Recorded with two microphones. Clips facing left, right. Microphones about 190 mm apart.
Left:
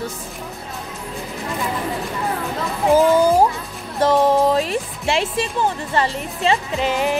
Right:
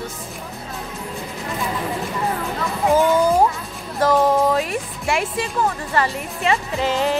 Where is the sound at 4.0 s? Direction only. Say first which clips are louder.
Left 1 dB; 25° left (ahead or behind).